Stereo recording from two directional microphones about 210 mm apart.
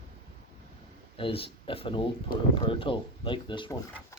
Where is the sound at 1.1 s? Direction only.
25° left (ahead or behind).